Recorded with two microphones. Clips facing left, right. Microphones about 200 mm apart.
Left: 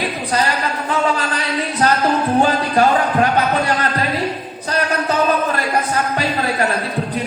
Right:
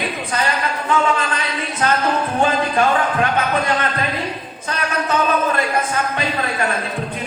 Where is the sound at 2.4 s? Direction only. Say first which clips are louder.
Even; 35° left (ahead or behind).